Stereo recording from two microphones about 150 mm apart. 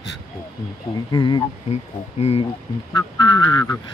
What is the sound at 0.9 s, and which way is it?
Speech, 30° left (ahead or behind).